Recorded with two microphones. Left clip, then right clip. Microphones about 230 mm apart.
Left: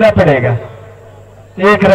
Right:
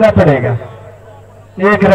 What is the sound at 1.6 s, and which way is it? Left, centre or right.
Speech, left.